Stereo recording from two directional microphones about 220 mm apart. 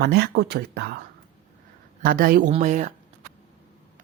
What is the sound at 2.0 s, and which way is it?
Speech, 40° right (ahead or behind).